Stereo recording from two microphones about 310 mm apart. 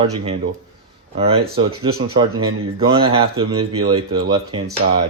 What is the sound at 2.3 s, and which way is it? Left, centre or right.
Speech, right.